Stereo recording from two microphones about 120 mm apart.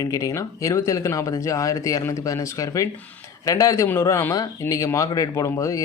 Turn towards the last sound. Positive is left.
turn(degrees=25)  # may be behind; listen again after turning